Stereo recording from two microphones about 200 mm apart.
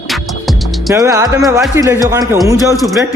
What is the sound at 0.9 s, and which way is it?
Music, 15° right (ahead or behind).